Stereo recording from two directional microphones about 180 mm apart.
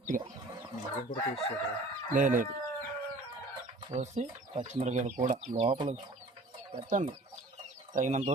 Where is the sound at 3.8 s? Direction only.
40° right (ahead or behind).